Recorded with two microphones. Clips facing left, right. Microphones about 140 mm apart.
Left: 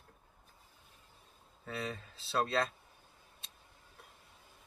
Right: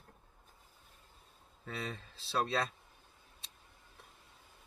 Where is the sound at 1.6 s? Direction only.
Centre (ahead or behind).